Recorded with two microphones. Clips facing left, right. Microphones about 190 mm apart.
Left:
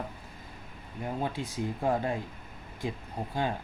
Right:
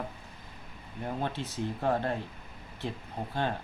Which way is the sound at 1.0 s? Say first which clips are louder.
Left 1 dB; 10° left (ahead or behind).